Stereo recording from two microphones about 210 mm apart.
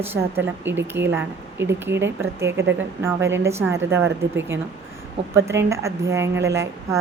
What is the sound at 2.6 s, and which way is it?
Speech, 60° right (ahead or behind).